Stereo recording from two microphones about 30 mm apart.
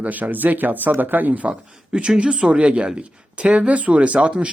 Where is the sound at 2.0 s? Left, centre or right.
Right.